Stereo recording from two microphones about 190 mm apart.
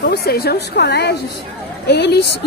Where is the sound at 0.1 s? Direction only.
55° left (ahead or behind).